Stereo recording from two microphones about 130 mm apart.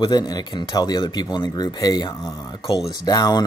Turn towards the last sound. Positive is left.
turn(degrees=30)  # may be behind; listen again after turning